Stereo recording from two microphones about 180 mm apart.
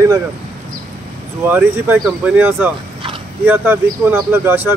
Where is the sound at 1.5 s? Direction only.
10° right (ahead or behind).